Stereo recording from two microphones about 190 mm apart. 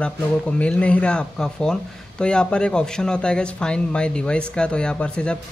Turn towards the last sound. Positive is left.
turn(degrees=5)  # may be behind; listen again after turning